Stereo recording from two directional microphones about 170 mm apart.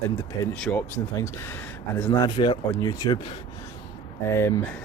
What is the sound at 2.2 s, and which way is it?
Speech, 25° left (ahead or behind).